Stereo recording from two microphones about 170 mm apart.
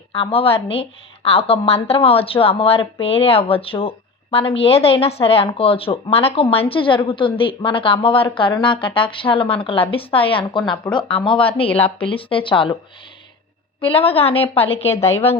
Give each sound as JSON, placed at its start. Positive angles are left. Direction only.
{"t": 0.1, "sound": "a woman's voice", "side_deg": 35}
{"t": 13.8, "sound": "a woman's voice", "side_deg": 35}